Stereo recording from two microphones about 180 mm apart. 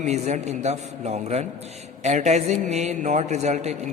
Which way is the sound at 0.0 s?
40° right (ahead or behind).